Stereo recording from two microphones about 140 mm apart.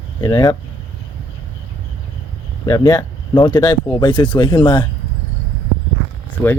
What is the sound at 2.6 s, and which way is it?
Speech, 30° left (ahead or behind).